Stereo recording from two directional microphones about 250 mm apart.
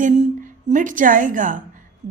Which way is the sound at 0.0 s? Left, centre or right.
Right.